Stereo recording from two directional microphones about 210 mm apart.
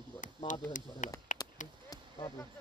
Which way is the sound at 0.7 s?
40° left (ahead or behind).